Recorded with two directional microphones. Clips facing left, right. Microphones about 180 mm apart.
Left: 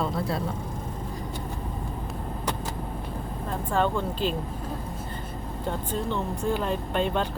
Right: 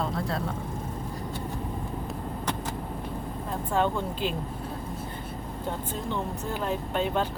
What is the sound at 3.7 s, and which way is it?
Speech, 15° right (ahead or behind).